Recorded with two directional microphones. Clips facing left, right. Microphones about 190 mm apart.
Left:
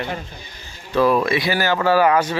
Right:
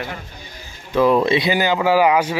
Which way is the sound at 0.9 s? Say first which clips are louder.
Right 2 dB; 20° right (ahead or behind).